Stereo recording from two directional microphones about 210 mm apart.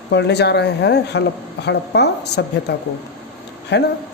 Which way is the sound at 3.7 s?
55° left (ahead or behind).